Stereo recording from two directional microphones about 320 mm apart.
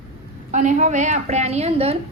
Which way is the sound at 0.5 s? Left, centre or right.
Right.